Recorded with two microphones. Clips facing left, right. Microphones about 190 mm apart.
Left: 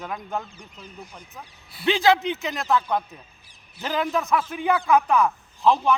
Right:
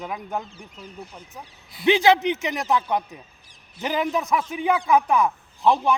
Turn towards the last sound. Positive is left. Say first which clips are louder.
# even
turn(degrees=-15)  # may be behind; listen again after turning